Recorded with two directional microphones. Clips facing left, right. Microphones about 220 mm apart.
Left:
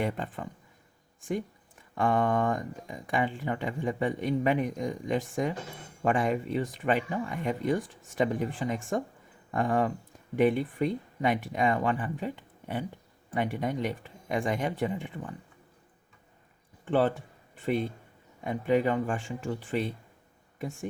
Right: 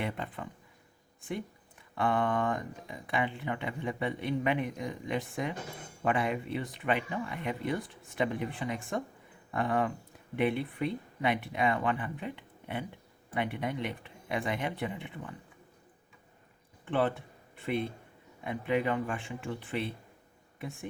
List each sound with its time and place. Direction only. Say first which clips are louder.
0.0 s speech: left 4 dB; 45° left (ahead or behind)
2.0 s speech: left 3 dB; 45° left (ahead or behind)
16.8 s speech: left 4 dB; 40° left (ahead or behind)
18.4 s speech: left 4 dB; 40° left (ahead or behind)